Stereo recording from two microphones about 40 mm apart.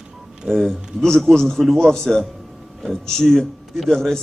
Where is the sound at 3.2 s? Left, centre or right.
Centre.